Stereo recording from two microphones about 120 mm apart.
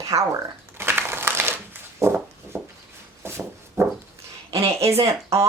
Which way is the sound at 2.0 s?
25° right (ahead or behind).